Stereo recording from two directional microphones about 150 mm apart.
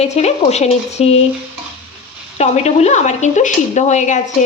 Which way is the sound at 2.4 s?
45° left (ahead or behind).